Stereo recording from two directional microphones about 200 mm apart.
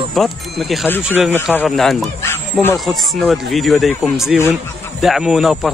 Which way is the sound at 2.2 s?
10° left (ahead or behind).